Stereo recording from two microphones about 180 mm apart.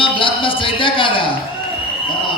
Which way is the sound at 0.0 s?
30° left (ahead or behind).